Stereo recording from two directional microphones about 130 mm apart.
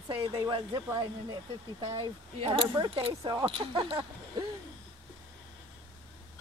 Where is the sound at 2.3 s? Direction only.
45° right (ahead or behind).